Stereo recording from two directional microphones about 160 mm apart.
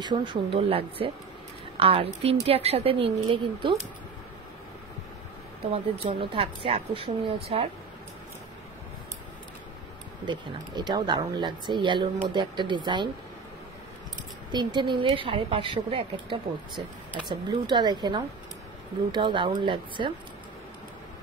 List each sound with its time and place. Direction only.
0.0 s a woman's voice: 30° right (ahead or behind)
6.0 s a woman's voice: 30° right (ahead or behind)
10.2 s speech: 30° right (ahead or behind)
14.5 s a woman's voice: 25° right (ahead or behind)